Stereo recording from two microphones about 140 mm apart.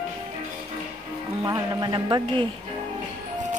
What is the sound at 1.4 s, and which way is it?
Speech, 25° right (ahead or behind).